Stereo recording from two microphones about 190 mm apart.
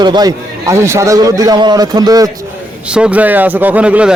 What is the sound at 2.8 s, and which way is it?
A man's voice, 5° right (ahead or behind).